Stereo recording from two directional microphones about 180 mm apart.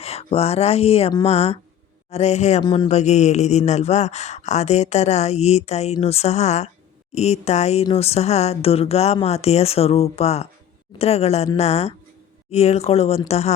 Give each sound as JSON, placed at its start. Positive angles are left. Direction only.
{"t": 0.0, "sound": "speech", "side_deg": 35}
{"t": 2.6, "sound": "speech", "side_deg": 25}
{"t": 2.9, "sound": "speech", "side_deg": 40}